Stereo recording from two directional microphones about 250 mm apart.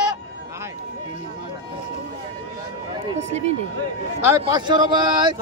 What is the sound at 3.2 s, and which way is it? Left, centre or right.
Speech, right.